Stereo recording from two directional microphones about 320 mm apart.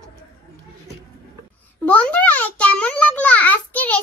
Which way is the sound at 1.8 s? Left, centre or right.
Centre.